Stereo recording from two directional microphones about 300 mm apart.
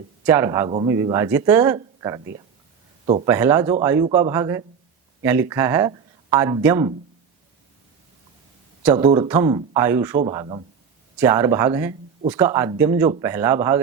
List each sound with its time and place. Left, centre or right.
0.3 s speech: centre
3.2 s speech: centre
8.8 s speech: centre